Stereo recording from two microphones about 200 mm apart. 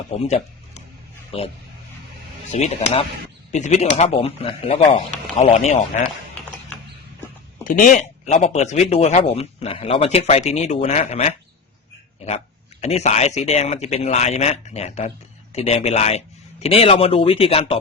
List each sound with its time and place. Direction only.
0.3 s a sound: 35° left (ahead or behind)
1.3 s a man's voice: 30° left (ahead or behind)
2.5 s speech: 35° left (ahead or behind)
7.6 s speech: 40° left (ahead or behind)
12.8 s a man's voice: 35° left (ahead or behind)